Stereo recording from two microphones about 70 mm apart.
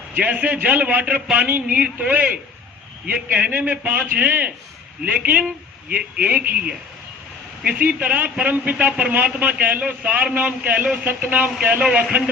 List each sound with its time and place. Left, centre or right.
0.1 s a man's voice: right
3.3 s a man's voice: right